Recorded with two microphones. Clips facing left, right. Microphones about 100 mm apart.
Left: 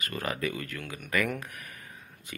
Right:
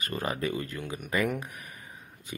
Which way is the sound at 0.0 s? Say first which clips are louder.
Right 1 dB; 25° right (ahead or behind).